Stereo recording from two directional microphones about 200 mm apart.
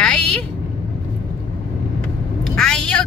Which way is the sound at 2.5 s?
5° left (ahead or behind).